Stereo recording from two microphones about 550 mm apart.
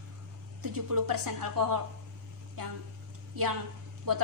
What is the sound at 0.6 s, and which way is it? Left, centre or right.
A woman's voice, right.